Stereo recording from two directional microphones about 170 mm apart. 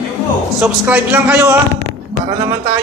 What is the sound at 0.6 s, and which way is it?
Speech, 10° right (ahead or behind).